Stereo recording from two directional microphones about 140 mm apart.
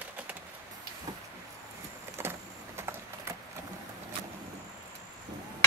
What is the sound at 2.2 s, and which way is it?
Vehicle, 15° right (ahead or behind).